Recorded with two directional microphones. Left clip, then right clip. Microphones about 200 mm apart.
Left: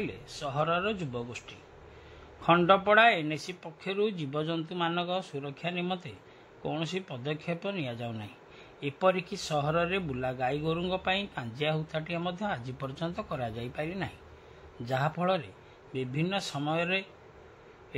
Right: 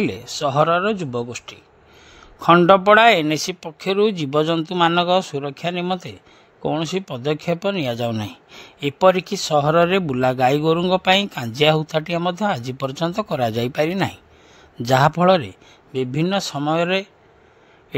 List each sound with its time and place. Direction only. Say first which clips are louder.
0.0 s speech: right 14 dB; 60° right (ahead or behind)